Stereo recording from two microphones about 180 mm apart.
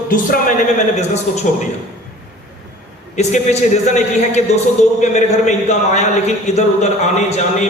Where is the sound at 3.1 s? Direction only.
40° left (ahead or behind).